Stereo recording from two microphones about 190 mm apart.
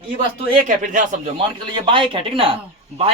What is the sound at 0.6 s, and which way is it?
Speech, 40° right (ahead or behind).